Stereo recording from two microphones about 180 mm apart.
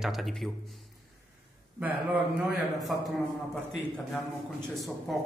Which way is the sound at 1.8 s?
10° right (ahead or behind).